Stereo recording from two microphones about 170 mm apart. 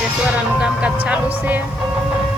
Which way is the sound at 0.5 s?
5° right (ahead or behind).